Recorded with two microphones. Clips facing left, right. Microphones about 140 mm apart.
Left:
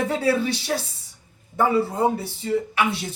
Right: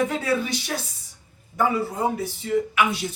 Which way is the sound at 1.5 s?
30° left (ahead or behind).